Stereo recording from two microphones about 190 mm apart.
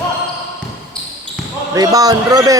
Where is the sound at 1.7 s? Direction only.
20° right (ahead or behind).